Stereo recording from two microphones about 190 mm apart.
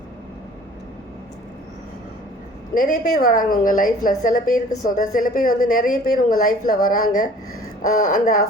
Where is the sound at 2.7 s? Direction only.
45° left (ahead or behind).